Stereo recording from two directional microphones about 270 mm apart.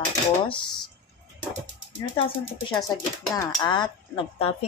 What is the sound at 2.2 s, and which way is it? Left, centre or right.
Speech, centre.